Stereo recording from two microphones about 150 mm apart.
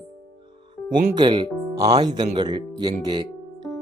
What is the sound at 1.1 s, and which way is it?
Speech, 30° right (ahead or behind).